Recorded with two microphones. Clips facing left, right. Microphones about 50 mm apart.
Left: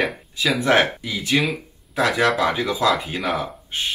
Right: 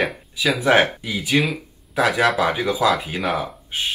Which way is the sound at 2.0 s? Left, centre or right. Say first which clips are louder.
Right 1 dB; centre.